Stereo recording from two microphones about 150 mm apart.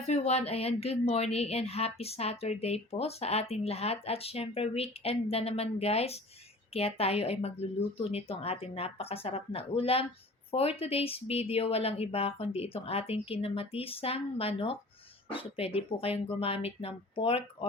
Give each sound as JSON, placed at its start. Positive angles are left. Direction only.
{"t": 0.0, "sound": "a woman's voice", "side_deg": 45}